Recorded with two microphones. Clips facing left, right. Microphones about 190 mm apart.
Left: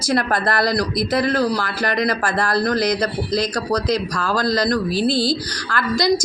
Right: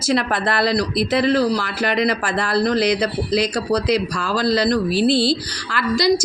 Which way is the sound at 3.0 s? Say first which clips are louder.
Right 1 dB; 10° right (ahead or behind).